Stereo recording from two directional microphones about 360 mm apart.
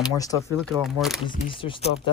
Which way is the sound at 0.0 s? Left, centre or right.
Centre.